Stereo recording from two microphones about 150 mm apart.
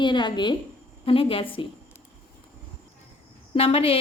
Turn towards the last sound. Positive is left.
turn(degrees=40)  # may be behind; listen again after turning